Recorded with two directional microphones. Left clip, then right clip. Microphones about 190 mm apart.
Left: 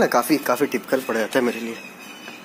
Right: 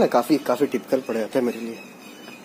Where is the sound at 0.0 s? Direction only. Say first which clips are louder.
Even; centre (ahead or behind).